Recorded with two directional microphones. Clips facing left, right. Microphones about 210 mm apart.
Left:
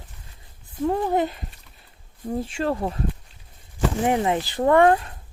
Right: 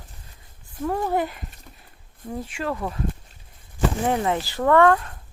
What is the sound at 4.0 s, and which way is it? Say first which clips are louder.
Speech: left 3 dB; 20° left (ahead or behind).